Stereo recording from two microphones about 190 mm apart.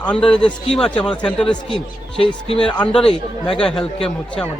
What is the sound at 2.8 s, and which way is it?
A man's voice, 5° left (ahead or behind).